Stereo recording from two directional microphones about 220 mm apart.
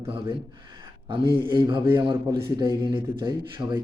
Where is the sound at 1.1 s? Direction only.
20° right (ahead or behind).